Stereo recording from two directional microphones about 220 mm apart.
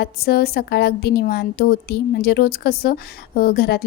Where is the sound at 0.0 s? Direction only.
45° left (ahead or behind).